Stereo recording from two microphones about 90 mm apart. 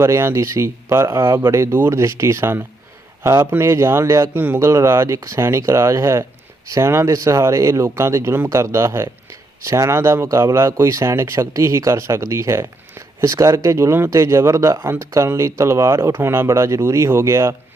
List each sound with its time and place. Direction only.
0.0 s a man's voice: 30° right (ahead or behind)